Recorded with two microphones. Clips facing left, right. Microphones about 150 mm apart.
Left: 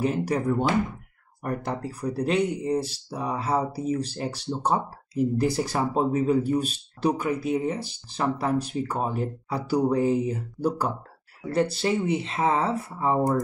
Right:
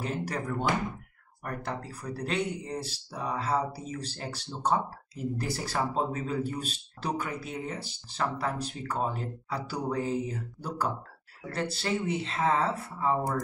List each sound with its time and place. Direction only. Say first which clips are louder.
0.0 s speech: left 8 dB; 15° left (ahead or behind)